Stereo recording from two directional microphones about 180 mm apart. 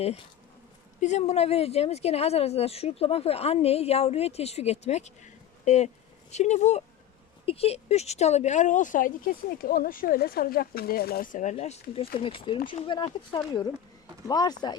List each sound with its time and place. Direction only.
1.0 s a woman's voice: 40° left (ahead or behind); by 14.5 s 20° left (ahead or behind)